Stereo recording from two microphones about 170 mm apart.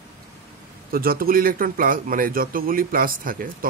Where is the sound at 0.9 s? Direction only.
60° right (ahead or behind).